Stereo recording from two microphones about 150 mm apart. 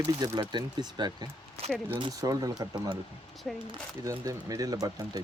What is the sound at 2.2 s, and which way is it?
Speech, 25° right (ahead or behind).